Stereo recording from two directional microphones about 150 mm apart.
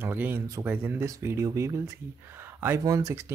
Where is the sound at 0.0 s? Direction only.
15° right (ahead or behind).